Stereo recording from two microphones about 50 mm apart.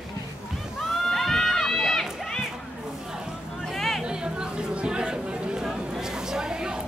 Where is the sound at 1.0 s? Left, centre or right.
Centre.